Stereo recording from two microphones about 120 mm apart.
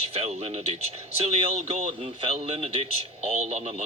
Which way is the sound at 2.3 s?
65° right (ahead or behind).